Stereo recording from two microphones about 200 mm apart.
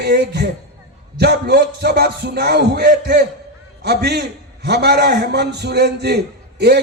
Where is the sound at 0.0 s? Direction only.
55° right (ahead or behind).